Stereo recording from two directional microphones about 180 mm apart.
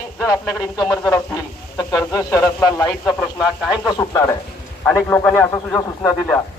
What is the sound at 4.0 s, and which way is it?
A man's voice, 20° left (ahead or behind).